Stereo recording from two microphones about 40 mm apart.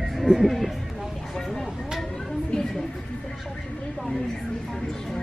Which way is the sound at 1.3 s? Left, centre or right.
Centre.